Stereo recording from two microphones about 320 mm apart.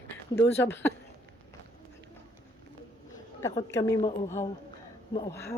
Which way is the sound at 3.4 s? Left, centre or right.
Centre.